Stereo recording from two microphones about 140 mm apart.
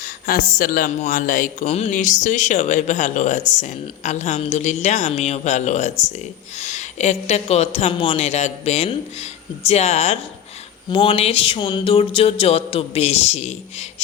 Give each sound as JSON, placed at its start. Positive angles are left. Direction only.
{"t": 0.0, "sound": "speech", "side_deg": 85}
{"t": 10.8, "sound": "speech", "side_deg": 35}